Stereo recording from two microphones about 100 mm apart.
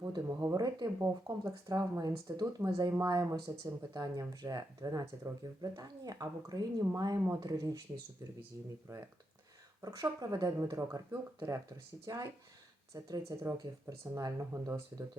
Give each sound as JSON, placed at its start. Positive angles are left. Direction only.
{"t": 0.3, "sound": "speech", "side_deg": -35}
{"t": 8.9, "sound": "speech", "side_deg": -30}
{"t": 14.5, "sound": "speech", "side_deg": -25}